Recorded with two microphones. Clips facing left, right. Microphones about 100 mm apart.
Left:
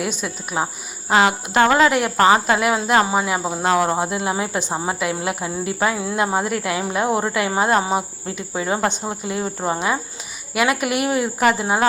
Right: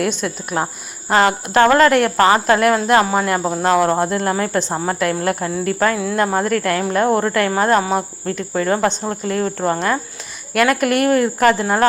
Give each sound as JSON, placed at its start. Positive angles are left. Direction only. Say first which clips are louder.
{"t": 0.2, "sound": "a woman's voice", "louder": "right 3 dB", "side_deg": 5}